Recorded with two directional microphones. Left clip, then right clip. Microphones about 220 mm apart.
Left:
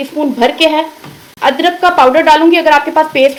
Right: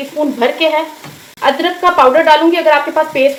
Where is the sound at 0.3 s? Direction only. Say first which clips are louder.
Left 3 dB; 35° left (ahead or behind).